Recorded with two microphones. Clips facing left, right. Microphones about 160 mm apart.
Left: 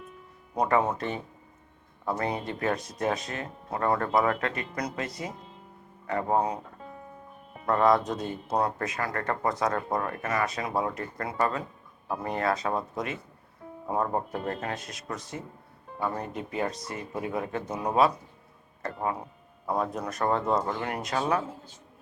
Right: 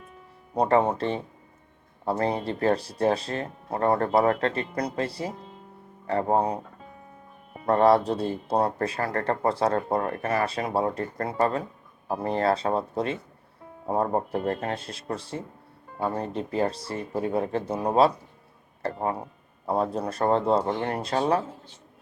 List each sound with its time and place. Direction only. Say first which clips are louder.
0.5 s speech: right 3 dB; 30° right (ahead or behind)
7.7 s speech: right 4 dB; 30° right (ahead or behind)